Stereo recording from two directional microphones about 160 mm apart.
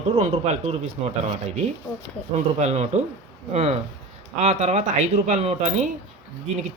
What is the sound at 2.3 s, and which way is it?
A man's voice, 45° right (ahead or behind).